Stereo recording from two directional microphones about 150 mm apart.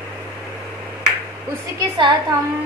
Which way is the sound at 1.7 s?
25° right (ahead or behind).